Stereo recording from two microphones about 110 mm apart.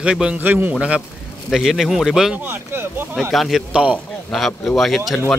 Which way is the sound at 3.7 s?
10° right (ahead or behind).